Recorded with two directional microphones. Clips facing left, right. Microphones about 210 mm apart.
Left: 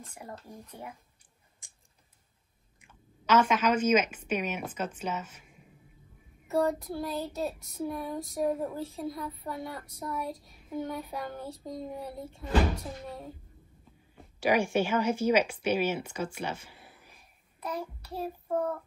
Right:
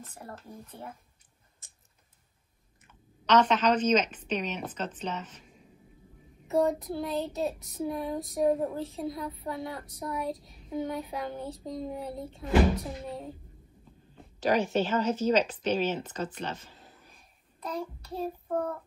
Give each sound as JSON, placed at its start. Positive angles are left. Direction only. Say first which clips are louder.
{"t": 0.0, "sound": "speech", "louder": "even", "side_deg": 10}
{"t": 2.8, "sound": "speech", "louder": "even", "side_deg": 10}
{"t": 6.5, "sound": "child singing", "louder": "right 2 dB", "side_deg": 0}
{"t": 14.1, "sound": "speech", "louder": "even", "side_deg": 10}
{"t": 17.6, "sound": "child singing", "louder": "right 1 dB", "side_deg": 5}